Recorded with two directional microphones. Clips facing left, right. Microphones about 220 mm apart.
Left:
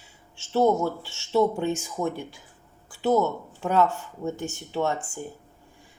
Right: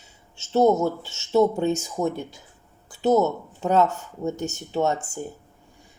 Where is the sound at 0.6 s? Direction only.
40° right (ahead or behind).